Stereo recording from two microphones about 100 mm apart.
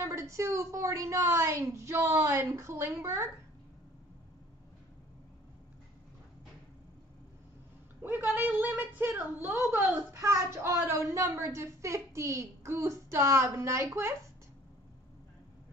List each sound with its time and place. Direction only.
0.0 s a woman's voice: 30° right (ahead or behind)
8.0 s a woman's voice: 20° right (ahead or behind)